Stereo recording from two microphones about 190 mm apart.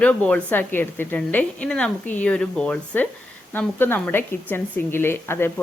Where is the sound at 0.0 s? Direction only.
5° left (ahead or behind).